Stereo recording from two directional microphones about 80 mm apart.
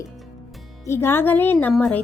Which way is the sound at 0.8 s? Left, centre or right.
Left.